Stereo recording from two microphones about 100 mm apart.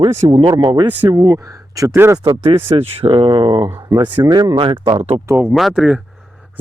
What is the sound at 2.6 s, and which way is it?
Speech, 70° right (ahead or behind).